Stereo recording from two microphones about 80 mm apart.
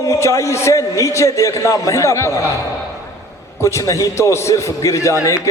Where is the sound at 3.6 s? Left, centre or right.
Left.